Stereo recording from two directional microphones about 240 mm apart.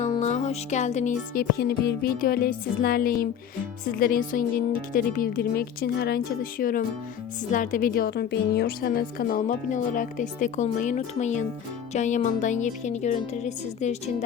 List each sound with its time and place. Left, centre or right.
0.1 s a woman's voice: left